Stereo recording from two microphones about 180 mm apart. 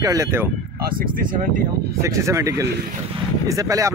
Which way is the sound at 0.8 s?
50° right (ahead or behind).